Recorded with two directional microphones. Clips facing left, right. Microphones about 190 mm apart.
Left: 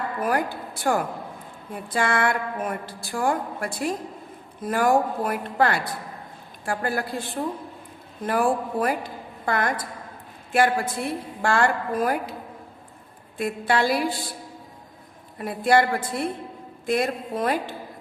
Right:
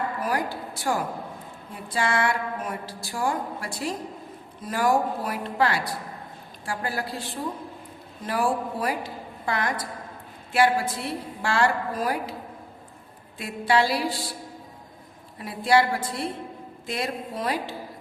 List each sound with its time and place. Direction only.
0.2 s a woman's voice: 55° left (ahead or behind)
8.3 s a woman's voice: 50° left (ahead or behind)
13.4 s a woman's voice: 50° left (ahead or behind)
15.4 s a woman's voice: 50° left (ahead or behind)